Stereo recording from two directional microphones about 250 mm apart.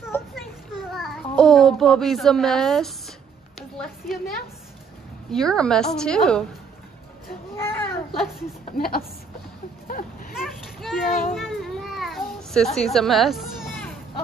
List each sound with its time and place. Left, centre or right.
0.1 s a sound: centre
5.3 s a woman's voice: centre
7.5 s baby cry: centre
8.7 s a woman's voice: left
10.3 s a sound: centre
12.9 s children playing: centre